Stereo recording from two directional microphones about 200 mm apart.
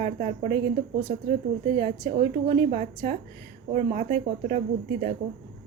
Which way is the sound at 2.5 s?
35° right (ahead or behind).